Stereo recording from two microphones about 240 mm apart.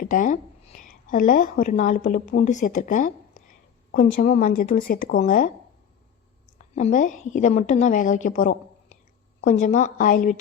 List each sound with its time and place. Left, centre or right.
0.0 s a woman's voice: left
6.7 s a woman's voice: left